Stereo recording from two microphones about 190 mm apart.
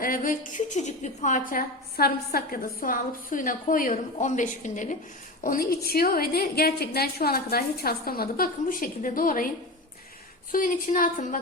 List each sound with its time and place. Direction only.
0.0 s a woman's voice: 45° left (ahead or behind)
10.5 s a woman's voice: 45° left (ahead or behind)